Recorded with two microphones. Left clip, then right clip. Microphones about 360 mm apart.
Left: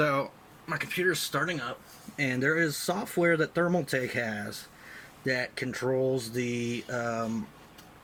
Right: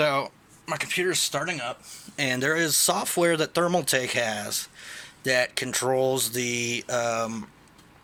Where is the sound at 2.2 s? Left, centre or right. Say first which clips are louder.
Right 3 dB; centre.